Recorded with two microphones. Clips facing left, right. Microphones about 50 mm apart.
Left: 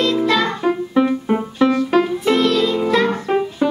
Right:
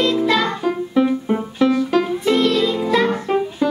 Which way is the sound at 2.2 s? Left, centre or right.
Centre.